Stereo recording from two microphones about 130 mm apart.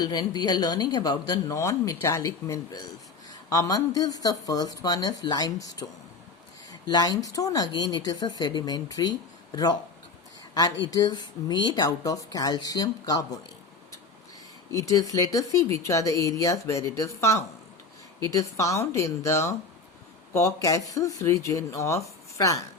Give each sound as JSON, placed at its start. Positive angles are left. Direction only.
{"t": 0.0, "sound": "speech", "side_deg": 30}
{"t": 6.8, "sound": "speech", "side_deg": 35}
{"t": 14.7, "sound": "speech", "side_deg": 25}